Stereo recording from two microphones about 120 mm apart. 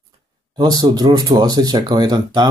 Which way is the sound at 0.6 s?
35° right (ahead or behind).